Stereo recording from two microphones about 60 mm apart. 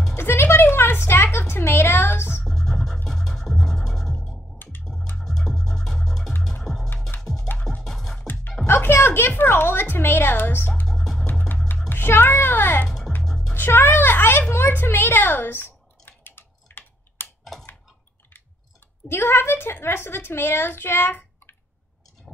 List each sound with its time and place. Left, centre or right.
0.1 s a sound: left
2.4 s music: centre
4.6 s music: left
5.1 s music: centre
8.6 s a sound: left
10.9 s music: centre
11.2 s music: left
11.9 s a sound: left
12.8 s music: centre
13.6 s a sound: left
14.5 s typing: left
19.0 s a woman's voice: left